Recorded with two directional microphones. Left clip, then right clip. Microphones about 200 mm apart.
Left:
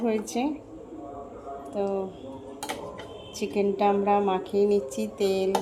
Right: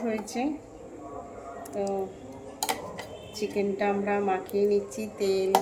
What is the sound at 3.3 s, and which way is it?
A woman's voice, 30° left (ahead or behind).